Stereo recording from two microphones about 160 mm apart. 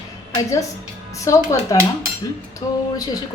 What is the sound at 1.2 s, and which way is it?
Speech, 20° left (ahead or behind).